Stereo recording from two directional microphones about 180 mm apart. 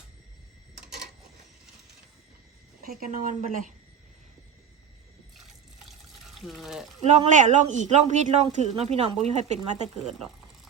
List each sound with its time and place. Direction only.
2.8 s a woman's voice: 50° right (ahead or behind)
5.4 s water: centre (ahead or behind)
7.0 s speech: 40° right (ahead or behind)
10.0 s speech: centre (ahead or behind)